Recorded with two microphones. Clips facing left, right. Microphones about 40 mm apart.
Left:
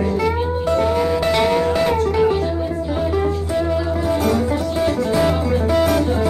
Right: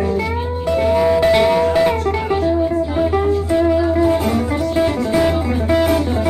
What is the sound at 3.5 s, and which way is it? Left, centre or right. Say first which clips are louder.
Music: right 5 dB; centre.